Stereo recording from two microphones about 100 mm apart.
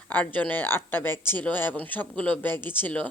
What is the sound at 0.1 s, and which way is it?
Speech, 15° left (ahead or behind).